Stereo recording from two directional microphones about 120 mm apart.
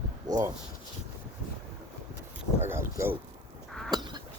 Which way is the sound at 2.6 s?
20° right (ahead or behind).